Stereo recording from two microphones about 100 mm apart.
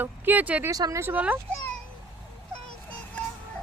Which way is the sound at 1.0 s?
15° right (ahead or behind).